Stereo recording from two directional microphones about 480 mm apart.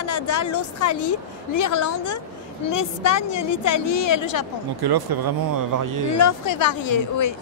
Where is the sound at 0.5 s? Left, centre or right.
Left.